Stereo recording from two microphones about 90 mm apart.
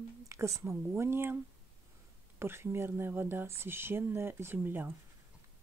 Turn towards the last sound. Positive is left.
turn(degrees=-20)  # may be behind; listen again after turning